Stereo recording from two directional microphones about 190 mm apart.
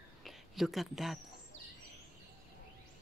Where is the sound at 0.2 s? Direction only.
Centre (ahead or behind).